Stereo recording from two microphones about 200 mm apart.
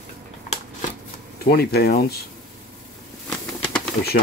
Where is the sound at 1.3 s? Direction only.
50° left (ahead or behind).